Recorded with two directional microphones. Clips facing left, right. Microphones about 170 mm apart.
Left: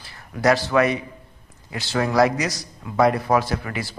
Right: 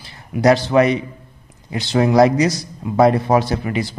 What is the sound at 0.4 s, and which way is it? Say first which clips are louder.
Speech: right 5 dB; 20° right (ahead or behind).